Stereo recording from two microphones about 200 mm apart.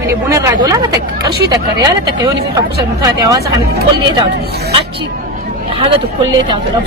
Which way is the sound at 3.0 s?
15° right (ahead or behind).